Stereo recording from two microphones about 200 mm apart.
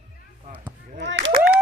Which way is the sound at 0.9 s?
60° right (ahead or behind).